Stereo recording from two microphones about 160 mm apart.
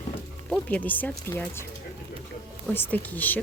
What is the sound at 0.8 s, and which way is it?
Speech, 10° left (ahead or behind).